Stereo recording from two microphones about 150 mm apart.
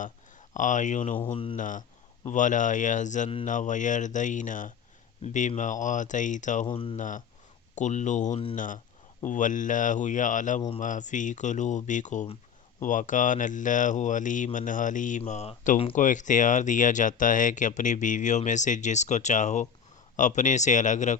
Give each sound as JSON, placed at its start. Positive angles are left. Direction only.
{"t": 0.0, "sound": "speech", "side_deg": 55}
{"t": 1.3, "sound": "speech", "side_deg": 35}
{"t": 1.5, "sound": "speech", "side_deg": 60}
{"t": 6.7, "sound": "speech", "side_deg": 35}
{"t": 6.9, "sound": "speech", "side_deg": 60}
{"t": 15.2, "sound": "speech", "side_deg": 45}